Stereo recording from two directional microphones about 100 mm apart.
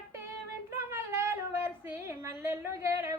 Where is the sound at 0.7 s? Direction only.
25° right (ahead or behind).